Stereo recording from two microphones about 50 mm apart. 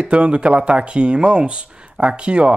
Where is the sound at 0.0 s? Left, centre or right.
Centre.